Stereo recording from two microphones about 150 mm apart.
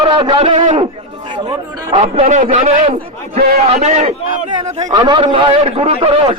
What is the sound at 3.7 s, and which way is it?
Speech, 50° right (ahead or behind).